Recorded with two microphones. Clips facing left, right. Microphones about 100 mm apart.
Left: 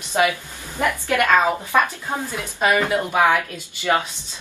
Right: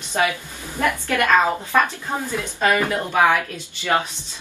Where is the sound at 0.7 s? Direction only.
15° left (ahead or behind).